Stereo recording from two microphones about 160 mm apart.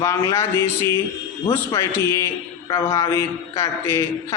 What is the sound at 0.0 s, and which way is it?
A man's voice, 20° left (ahead or behind).